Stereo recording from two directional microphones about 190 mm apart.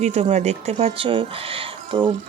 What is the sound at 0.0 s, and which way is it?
Speech, 35° right (ahead or behind).